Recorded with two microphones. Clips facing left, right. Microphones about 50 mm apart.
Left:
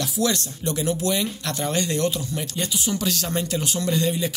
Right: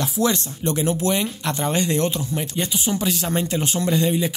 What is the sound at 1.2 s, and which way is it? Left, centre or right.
Speech, centre.